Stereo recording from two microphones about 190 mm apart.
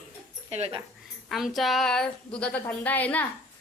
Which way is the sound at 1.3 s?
Centre (ahead or behind).